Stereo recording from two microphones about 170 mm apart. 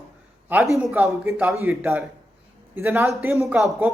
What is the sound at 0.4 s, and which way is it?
A man's voice, 10° right (ahead or behind).